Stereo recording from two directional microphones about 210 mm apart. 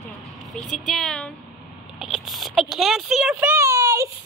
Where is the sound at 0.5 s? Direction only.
Centre (ahead or behind).